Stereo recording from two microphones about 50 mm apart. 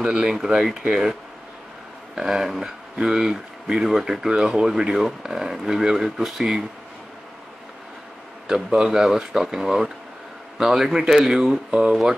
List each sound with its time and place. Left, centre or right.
0.0 s speech: centre
2.1 s speech: centre
8.5 s speech: centre